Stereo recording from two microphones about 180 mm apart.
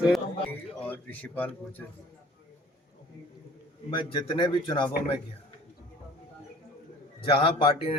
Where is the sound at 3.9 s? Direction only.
25° left (ahead or behind).